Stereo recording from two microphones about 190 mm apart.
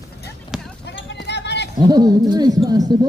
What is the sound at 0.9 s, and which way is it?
Clip-clop, 65° left (ahead or behind).